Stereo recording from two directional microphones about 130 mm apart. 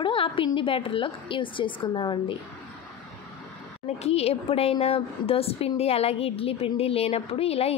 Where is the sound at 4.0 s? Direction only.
55° left (ahead or behind).